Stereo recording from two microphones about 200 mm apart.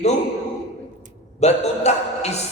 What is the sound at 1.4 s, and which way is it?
A man's voice, 35° left (ahead or behind).